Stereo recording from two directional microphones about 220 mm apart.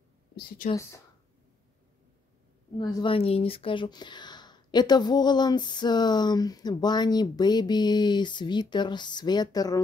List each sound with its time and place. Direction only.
0.7 s speech: 15° left (ahead or behind)
2.8 s speech: 20° left (ahead or behind)